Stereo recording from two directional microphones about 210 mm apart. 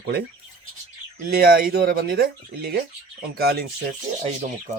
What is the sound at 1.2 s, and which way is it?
Speech, 45° right (ahead or behind).